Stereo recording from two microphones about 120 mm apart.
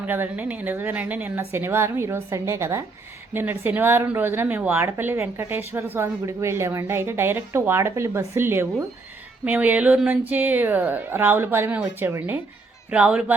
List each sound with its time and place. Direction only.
0.0 s a woman's voice: 15° right (ahead or behind)